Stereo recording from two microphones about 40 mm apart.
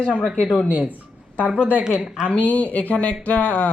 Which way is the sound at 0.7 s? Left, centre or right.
Right.